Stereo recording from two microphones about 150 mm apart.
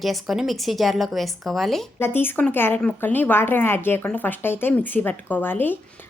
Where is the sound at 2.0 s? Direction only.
15° left (ahead or behind).